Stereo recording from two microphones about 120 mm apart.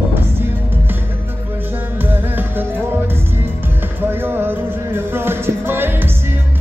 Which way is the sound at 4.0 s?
20° right (ahead or behind).